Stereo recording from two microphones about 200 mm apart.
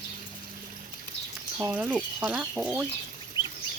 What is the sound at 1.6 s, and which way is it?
Speech, 10° right (ahead or behind).